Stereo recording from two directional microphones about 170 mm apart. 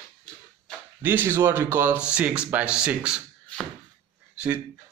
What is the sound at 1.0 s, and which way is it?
Speech, 10° right (ahead or behind).